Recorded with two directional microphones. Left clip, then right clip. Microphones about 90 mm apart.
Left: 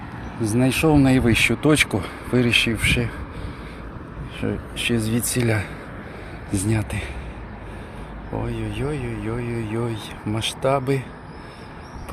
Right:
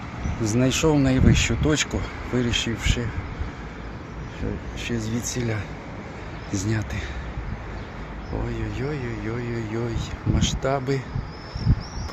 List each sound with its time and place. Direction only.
0.6 s speech: 20° left (ahead or behind)
0.9 s speech: 40° left (ahead or behind)
4.8 s speech: 65° left (ahead or behind)
6.5 s speech: 30° left (ahead or behind)
8.7 s speech: 25° left (ahead or behind)